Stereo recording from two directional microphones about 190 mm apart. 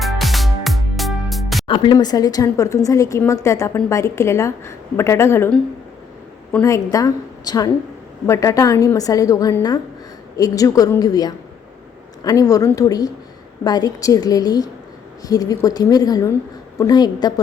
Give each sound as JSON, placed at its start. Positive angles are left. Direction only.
{"t": 0.0, "sound": "music", "side_deg": 0}
{"t": 1.6, "sound": "a woman's voice", "side_deg": 25}